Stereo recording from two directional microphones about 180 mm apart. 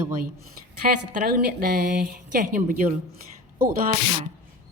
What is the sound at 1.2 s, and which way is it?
Speech, 55° right (ahead or behind).